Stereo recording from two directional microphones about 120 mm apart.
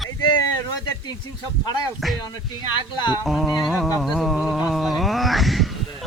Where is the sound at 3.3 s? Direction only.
Centre (ahead or behind).